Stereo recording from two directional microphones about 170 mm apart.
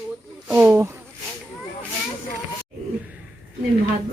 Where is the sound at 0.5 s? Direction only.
15° right (ahead or behind).